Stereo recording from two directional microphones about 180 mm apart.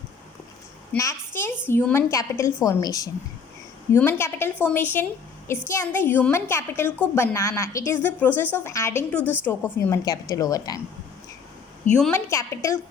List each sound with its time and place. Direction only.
0.9 s a woman's voice: 15° left (ahead or behind)
11.9 s a woman's voice: 5° left (ahead or behind)
12.1 s a woman's voice: 15° left (ahead or behind)